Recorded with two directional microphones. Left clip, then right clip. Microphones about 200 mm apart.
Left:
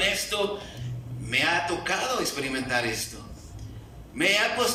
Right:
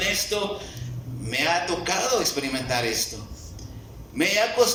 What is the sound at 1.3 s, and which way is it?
A man's voice, 25° right (ahead or behind).